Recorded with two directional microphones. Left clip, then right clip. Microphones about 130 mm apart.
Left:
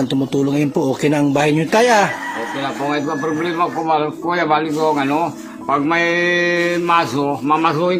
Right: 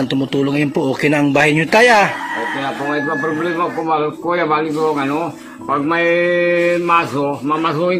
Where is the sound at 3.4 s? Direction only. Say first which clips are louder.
Even; 45° left (ahead or behind).